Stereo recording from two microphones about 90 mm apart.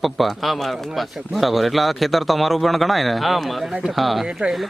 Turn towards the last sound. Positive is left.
turn(degrees=-5)  # may be behind; listen again after turning